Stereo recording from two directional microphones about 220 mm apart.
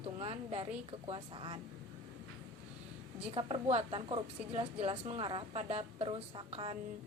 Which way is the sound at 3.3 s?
25° right (ahead or behind).